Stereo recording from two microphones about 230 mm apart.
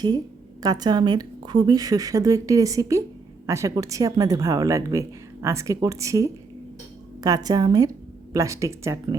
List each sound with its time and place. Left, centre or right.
0.6 s speech: centre